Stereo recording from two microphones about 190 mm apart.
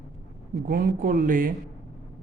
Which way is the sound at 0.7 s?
50° right (ahead or behind).